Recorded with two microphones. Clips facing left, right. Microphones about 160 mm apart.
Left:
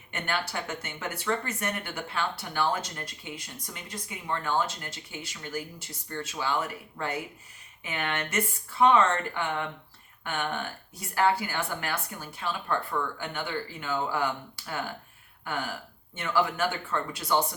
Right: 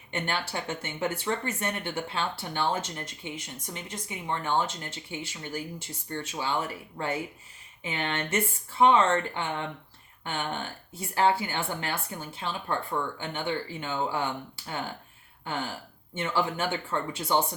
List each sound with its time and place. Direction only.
0.1 s speech: 25° right (ahead or behind)